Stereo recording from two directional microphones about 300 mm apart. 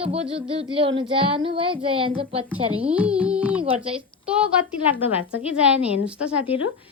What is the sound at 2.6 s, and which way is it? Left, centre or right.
Speech, centre.